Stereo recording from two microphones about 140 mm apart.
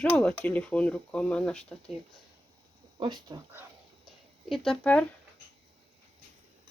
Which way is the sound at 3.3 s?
35° right (ahead or behind).